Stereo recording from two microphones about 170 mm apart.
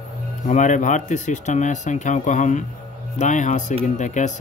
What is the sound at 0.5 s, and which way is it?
Speech, 45° left (ahead or behind).